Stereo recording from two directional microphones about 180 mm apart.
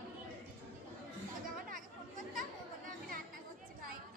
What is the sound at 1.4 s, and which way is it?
Chatter, 50° right (ahead or behind).